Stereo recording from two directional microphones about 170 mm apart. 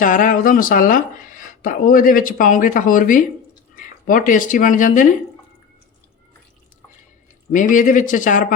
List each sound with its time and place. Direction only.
0.0 s speech: 50° left (ahead or behind)
7.5 s speech: 50° left (ahead or behind)